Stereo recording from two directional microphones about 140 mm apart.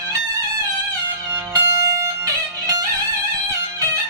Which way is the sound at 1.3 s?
20° right (ahead or behind).